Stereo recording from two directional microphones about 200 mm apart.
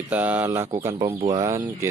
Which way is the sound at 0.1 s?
10° right (ahead or behind).